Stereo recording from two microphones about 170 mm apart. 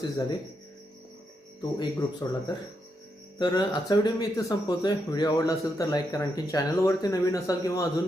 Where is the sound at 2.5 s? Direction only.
25° left (ahead or behind).